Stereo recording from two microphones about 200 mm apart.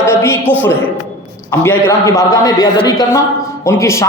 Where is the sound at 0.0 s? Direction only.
15° left (ahead or behind).